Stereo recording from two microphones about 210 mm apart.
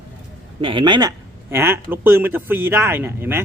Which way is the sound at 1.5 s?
10° right (ahead or behind).